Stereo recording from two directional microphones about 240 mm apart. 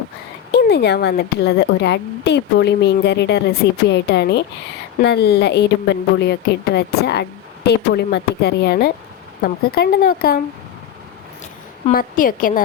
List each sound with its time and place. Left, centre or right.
0.5 s a woman's voice: left
11.9 s speech: left